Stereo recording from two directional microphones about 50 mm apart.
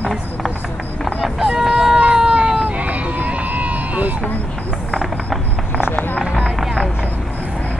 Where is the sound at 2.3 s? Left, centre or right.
Centre.